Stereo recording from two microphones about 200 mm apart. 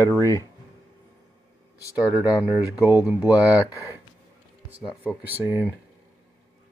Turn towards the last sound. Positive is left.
turn(degrees=-10)  # may be behind; listen again after turning